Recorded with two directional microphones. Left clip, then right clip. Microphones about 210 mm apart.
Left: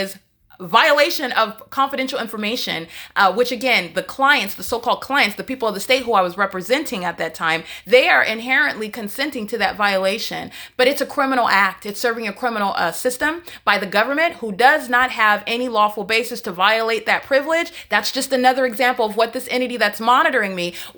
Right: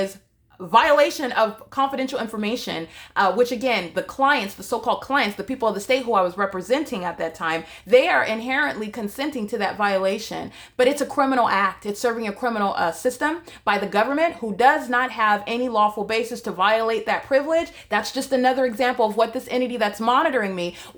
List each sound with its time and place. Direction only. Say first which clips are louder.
0.7 s speech: left 2 dB; centre (ahead or behind)